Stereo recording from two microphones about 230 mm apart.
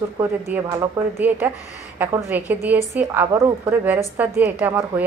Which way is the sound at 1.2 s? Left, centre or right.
Centre.